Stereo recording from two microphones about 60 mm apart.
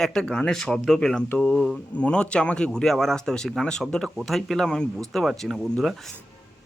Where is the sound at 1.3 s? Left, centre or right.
Left.